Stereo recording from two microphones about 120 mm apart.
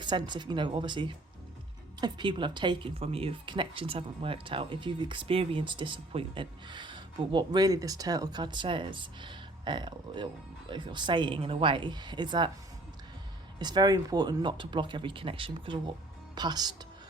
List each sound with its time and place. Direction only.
0.0 s speech: 40° right (ahead or behind)
13.6 s speech: 35° right (ahead or behind)